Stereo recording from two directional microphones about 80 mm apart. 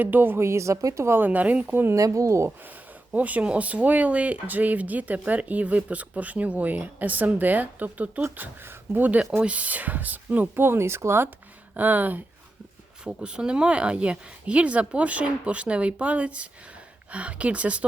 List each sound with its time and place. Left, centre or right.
0.0 s speech: right
2.0 s speech: right
2.6 s speech: centre
11.7 s speech: right
13.1 s speech: centre